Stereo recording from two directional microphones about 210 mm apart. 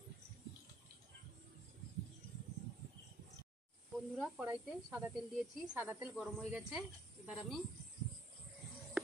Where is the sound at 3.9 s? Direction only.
Centre (ahead or behind).